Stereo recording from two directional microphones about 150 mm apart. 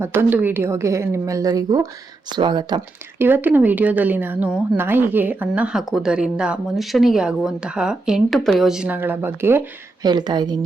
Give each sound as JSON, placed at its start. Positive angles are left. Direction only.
{"t": 0.0, "sound": "a woman's voice", "side_deg": -15}
{"t": 3.2, "sound": "a woman's voice", "side_deg": -15}
{"t": 10.0, "sound": "a woman's voice", "side_deg": -30}